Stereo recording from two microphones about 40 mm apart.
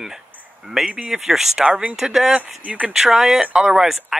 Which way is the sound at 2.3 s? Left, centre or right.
Right.